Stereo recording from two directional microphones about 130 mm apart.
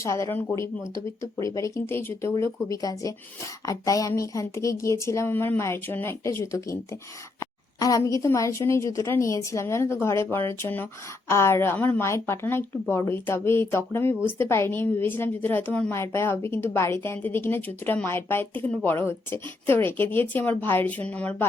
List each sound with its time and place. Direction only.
0.0 s a woman's voice: 25° left (ahead or behind)